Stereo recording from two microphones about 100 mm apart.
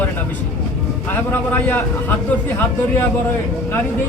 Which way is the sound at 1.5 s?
20° left (ahead or behind).